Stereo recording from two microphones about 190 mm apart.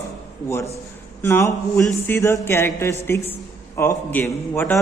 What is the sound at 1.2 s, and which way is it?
A man's voice, 10° left (ahead or behind).